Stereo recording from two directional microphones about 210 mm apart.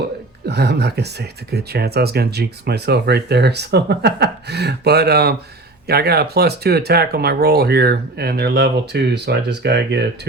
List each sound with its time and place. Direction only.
0.4 s speech: 50° right (ahead or behind)